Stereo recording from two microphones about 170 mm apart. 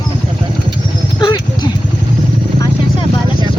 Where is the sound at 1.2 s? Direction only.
25° left (ahead or behind).